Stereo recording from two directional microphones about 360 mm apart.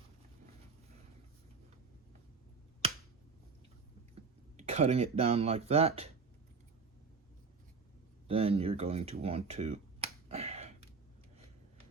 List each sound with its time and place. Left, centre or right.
4.5 s a sound: centre
5.1 s speech: centre
8.3 s speech: centre